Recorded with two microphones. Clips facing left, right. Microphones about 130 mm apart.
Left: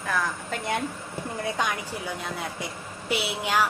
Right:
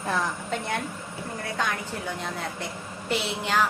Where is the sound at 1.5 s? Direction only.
15° left (ahead or behind).